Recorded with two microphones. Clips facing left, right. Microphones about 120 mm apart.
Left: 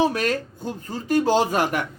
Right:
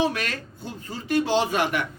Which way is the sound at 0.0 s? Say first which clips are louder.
Left 4 dB; 40° left (ahead or behind).